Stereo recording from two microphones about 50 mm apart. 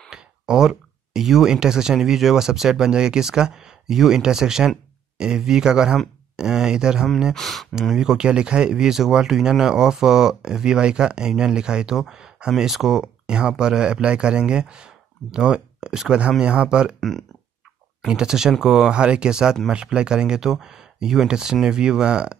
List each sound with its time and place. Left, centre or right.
0.1 s speech: centre
7.3 s speech: centre
8.0 s speech: centre
18.0 s speech: centre